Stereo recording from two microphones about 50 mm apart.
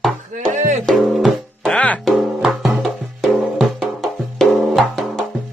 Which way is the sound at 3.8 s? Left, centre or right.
Centre.